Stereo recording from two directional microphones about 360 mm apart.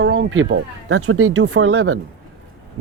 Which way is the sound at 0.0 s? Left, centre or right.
Right.